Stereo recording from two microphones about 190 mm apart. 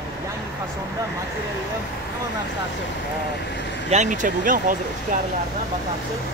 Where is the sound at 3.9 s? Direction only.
40° right (ahead or behind).